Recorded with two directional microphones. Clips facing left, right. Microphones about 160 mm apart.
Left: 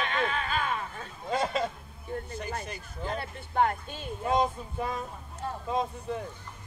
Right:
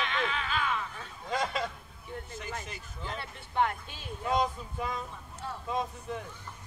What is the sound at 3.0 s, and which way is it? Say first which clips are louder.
Speech: left 6 dB; 45° left (ahead or behind).